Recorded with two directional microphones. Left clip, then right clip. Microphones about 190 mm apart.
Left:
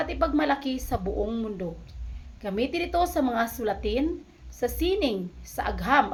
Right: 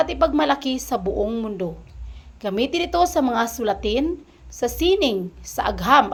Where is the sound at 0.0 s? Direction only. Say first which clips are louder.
Right 7 dB; 25° right (ahead or behind).